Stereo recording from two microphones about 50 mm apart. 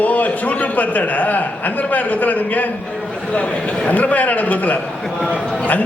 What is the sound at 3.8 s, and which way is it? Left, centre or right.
A man's voice, left.